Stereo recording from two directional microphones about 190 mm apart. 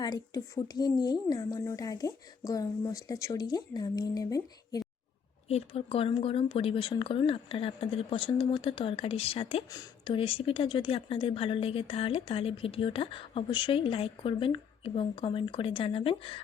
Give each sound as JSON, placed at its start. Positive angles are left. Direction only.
{"t": 0.0, "sound": "speech", "side_deg": 20}
{"t": 5.5, "sound": "speech", "side_deg": 30}